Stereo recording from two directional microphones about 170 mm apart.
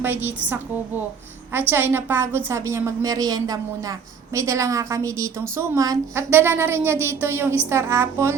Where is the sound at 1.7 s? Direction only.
15° right (ahead or behind).